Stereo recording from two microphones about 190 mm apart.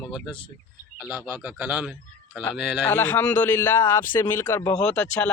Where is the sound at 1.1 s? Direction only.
10° right (ahead or behind).